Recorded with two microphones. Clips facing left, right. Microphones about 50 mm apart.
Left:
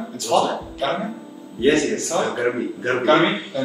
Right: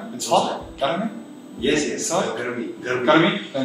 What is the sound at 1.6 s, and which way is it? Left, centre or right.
Speech, left.